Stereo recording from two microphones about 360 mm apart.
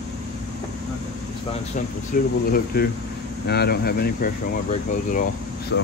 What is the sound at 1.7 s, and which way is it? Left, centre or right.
Speech, left.